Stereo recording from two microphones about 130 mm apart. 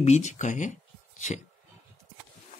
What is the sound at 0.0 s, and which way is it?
Speech, 65° left (ahead or behind).